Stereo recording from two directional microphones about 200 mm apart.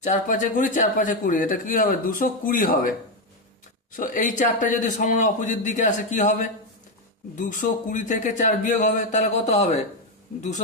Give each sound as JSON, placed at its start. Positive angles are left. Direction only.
{"t": 0.0, "sound": "speech", "side_deg": 40}
{"t": 3.9, "sound": "speech", "side_deg": 40}